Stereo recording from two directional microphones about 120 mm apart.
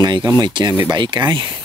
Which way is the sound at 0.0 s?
40° right (ahead or behind).